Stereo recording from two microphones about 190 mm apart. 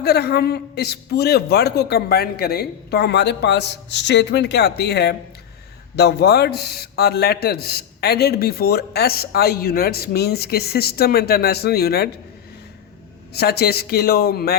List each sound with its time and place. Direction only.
0.0 s a man's voice: 60° left (ahead or behind)
13.3 s a man's voice: 55° left (ahead or behind)